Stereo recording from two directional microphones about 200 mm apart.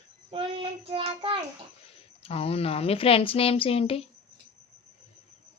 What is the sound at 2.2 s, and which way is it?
Speech, 30° left (ahead or behind).